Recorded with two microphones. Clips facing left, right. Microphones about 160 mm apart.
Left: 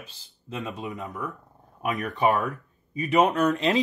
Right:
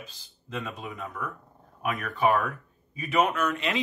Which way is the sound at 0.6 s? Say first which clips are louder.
Left 3 dB; 15° left (ahead or behind).